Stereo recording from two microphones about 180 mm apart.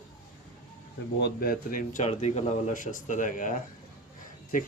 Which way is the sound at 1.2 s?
55° left (ahead or behind).